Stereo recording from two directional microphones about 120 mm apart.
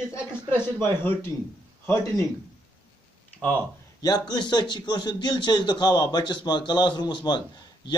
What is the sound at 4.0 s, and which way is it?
Speech, 35° left (ahead or behind).